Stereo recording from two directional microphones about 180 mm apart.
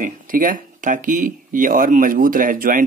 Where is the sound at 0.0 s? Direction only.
50° right (ahead or behind).